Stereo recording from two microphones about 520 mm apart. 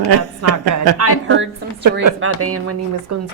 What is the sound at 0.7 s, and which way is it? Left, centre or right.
Speech, right.